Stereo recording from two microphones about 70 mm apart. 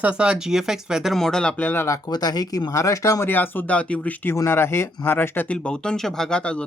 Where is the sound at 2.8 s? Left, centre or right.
Left.